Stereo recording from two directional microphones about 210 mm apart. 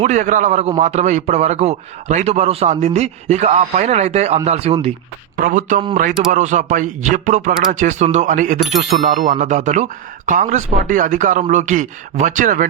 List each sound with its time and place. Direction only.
0.0 s speech: 35° right (ahead or behind)
5.4 s speech: 40° right (ahead or behind)